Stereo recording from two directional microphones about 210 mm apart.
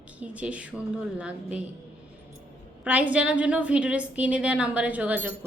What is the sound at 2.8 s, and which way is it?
A woman's voice, 5° right (ahead or behind).